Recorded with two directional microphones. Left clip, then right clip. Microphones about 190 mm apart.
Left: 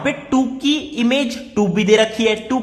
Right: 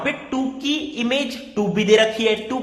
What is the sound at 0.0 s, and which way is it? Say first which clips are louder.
A man's voice: left 5 dB; 20° left (ahead or behind).